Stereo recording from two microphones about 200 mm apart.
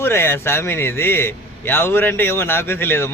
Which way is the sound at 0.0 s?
10° left (ahead or behind).